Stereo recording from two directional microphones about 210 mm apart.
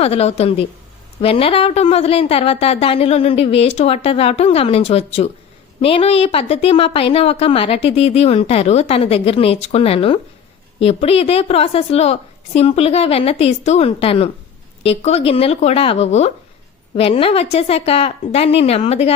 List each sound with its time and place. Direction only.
0.0 s a woman's voice: 30° left (ahead or behind)